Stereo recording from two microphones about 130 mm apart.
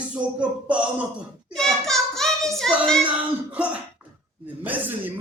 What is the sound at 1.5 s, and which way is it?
Hands, 5° left (ahead or behind).